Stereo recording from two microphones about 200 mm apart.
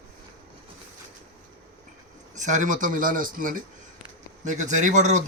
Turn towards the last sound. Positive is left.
turn(degrees=-35)  # may be behind; listen again after turning